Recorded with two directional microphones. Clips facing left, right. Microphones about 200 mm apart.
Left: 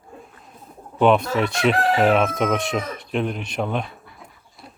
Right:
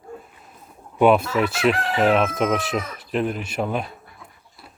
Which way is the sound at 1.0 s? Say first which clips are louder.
Right 1 dB; 5° right (ahead or behind).